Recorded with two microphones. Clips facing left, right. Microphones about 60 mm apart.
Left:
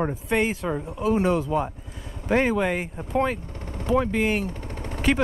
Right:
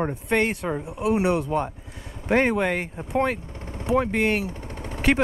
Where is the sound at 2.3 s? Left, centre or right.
Right.